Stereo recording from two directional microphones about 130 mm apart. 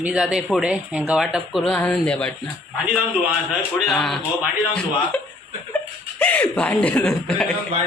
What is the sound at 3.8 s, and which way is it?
Speech, centre (ahead or behind).